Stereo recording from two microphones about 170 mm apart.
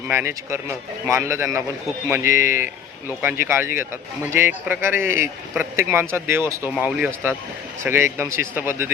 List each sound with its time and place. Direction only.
0.1 s a man's voice: 15° right (ahead or behind)